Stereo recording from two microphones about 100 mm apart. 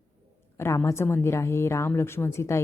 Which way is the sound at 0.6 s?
25° left (ahead or behind).